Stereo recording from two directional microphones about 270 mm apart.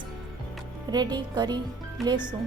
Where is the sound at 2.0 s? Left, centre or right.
Centre.